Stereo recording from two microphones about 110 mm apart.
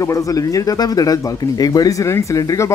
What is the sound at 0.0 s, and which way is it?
Speech, 30° left (ahead or behind).